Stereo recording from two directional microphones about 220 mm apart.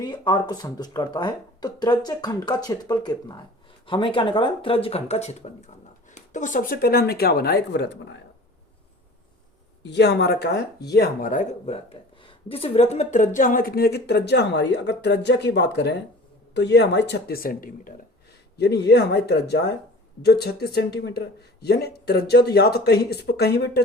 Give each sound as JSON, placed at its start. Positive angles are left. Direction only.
{"t": 0.0, "sound": "speech", "side_deg": 20}
{"t": 9.8, "sound": "speech", "side_deg": 50}
{"t": 18.5, "sound": "speech", "side_deg": 50}